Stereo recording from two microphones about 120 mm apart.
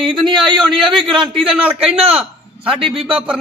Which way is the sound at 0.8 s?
Centre (ahead or behind).